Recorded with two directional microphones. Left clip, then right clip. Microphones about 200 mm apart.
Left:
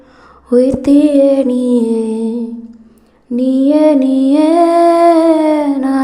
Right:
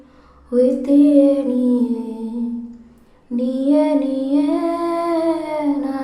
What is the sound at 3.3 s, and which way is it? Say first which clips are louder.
Music: left 6 dB; 40° left (ahead or behind).